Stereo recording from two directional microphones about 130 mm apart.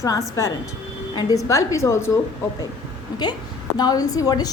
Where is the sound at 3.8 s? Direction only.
30° left (ahead or behind).